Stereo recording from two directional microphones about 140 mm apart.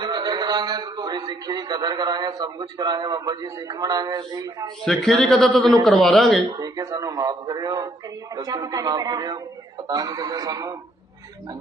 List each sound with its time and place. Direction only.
0.0 s a man's voice: 30° right (ahead or behind)
4.9 s speech: centre (ahead or behind)
6.6 s speech: 25° right (ahead or behind)